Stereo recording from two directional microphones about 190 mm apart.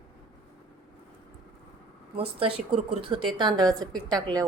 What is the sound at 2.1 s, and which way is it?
Speech, 30° right (ahead or behind).